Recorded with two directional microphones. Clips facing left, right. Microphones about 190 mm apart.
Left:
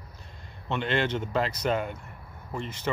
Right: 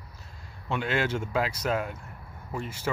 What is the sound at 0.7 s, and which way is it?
Speech, 5° right (ahead or behind).